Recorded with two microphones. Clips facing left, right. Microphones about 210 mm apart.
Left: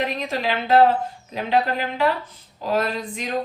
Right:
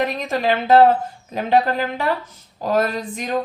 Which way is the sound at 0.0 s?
45° right (ahead or behind).